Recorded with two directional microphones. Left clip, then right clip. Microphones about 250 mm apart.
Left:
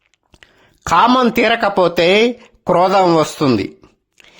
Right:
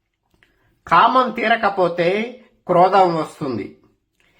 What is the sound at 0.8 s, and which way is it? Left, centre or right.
Speech, left.